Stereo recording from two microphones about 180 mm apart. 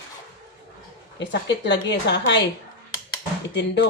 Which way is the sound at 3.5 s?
70° left (ahead or behind).